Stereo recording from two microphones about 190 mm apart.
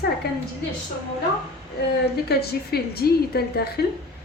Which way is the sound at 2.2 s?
55° left (ahead or behind).